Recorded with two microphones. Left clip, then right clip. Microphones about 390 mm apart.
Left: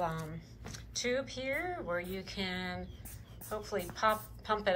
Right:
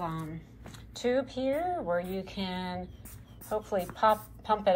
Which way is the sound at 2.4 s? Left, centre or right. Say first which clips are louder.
Left 1 dB; centre.